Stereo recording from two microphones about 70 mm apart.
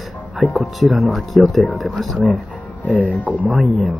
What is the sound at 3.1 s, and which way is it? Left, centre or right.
Speech, left.